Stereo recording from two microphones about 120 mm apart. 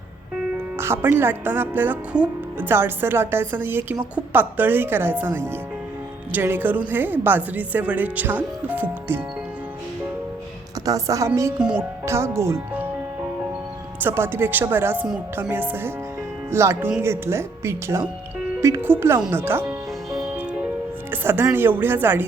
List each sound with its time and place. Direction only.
0.5 s a woman's voice: 20° right (ahead or behind)
10.8 s a woman's voice: 30° right (ahead or behind)
14.0 s a woman's voice: 20° right (ahead or behind)
21.1 s a woman's voice: 20° right (ahead or behind)